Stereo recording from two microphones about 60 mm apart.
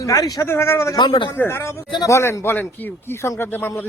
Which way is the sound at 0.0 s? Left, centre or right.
Left.